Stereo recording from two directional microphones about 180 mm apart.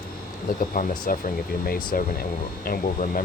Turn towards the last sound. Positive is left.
turn(degrees=50)  # may be behind; listen again after turning